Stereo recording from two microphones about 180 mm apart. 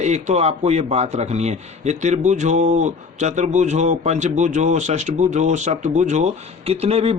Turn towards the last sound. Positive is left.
turn(degrees=-35)  # may be behind; listen again after turning